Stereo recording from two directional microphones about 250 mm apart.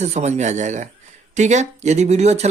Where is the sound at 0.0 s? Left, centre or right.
Right.